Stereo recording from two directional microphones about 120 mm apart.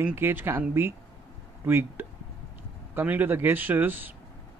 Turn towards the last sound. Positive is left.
turn(degrees=-15)  # may be behind; listen again after turning